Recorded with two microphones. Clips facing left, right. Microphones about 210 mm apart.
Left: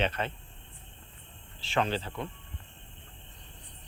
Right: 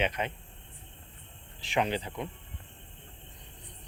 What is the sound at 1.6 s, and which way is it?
Speech, 15° right (ahead or behind).